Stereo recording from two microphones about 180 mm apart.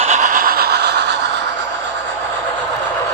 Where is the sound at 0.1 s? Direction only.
45° right (ahead or behind); by 1.1 s 65° right (ahead or behind).